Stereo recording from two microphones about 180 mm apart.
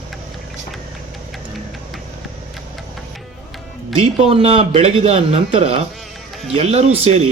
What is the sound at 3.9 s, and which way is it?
Speech, 35° right (ahead or behind).